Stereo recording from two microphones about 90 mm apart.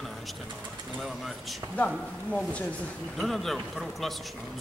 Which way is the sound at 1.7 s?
15° left (ahead or behind).